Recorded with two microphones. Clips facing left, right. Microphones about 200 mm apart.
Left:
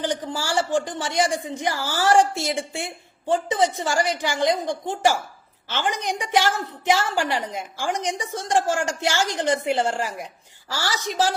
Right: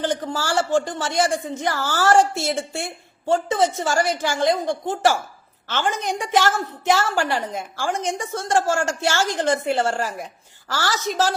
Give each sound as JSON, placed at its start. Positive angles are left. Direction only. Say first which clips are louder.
{"t": 0.0, "sound": "a woman's voice", "louder": "right 2 dB", "side_deg": 15}